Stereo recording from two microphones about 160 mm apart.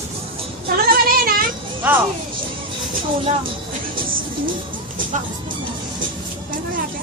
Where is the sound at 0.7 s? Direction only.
65° right (ahead or behind).